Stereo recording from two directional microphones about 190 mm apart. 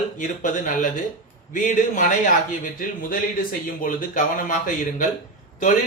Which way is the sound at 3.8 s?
45° left (ahead or behind).